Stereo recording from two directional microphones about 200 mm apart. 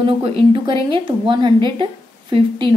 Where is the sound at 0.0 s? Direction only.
25° right (ahead or behind).